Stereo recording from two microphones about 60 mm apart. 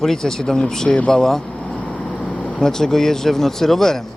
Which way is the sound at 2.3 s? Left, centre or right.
Left.